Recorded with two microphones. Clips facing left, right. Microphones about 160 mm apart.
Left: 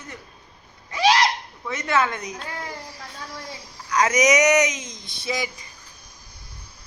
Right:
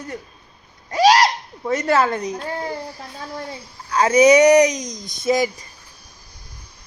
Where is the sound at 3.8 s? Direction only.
30° right (ahead or behind); by 5.5 s 45° right (ahead or behind).